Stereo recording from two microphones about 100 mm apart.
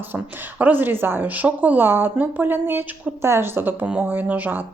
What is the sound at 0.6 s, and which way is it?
A woman's voice, 20° right (ahead or behind).